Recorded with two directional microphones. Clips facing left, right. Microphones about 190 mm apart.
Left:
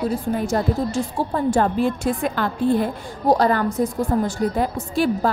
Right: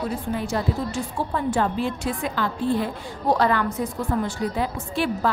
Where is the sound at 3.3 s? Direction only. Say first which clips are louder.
Left 3 dB; 40° left (ahead or behind).